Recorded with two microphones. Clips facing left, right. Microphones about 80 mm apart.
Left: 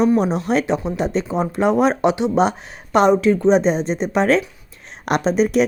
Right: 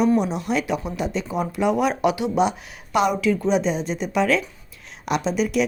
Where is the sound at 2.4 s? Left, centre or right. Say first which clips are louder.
Left 3 dB; left.